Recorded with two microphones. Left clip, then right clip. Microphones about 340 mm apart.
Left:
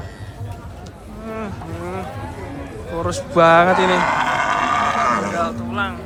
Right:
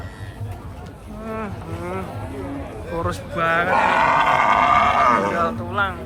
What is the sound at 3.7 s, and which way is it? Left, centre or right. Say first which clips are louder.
Livestock: even; right.